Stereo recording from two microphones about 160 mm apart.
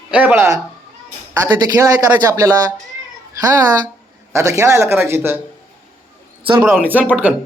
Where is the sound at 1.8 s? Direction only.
20° right (ahead or behind).